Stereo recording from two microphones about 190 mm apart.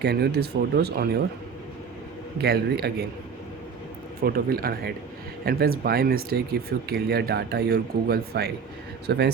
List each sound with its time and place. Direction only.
0.0 s speech: 60° right (ahead or behind)
2.4 s speech: 55° right (ahead or behind)
4.2 s speech: 50° right (ahead or behind)